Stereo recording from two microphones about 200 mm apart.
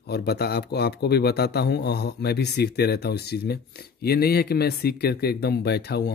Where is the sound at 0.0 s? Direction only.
55° left (ahead or behind).